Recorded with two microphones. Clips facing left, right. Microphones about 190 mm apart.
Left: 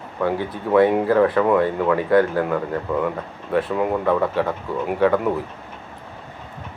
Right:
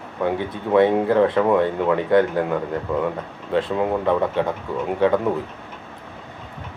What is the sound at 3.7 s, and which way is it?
Speech, 20° right (ahead or behind).